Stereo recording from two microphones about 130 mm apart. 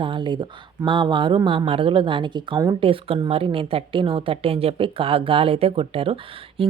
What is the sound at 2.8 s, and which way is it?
A woman's voice, 45° right (ahead or behind).